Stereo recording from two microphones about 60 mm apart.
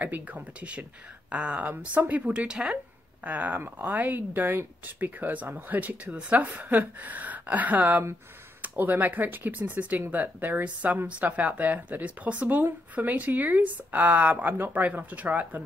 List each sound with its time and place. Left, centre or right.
0.0 s speech: right
3.3 s speech: right